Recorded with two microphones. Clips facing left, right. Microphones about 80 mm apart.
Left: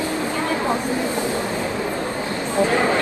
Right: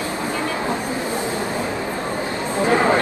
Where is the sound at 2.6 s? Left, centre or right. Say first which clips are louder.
Right 6 dB; right.